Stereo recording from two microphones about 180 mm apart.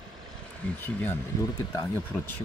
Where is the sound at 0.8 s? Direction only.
10° left (ahead or behind).